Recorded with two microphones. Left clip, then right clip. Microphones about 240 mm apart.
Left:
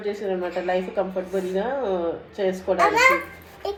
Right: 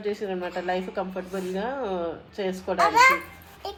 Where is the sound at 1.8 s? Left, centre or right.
Right.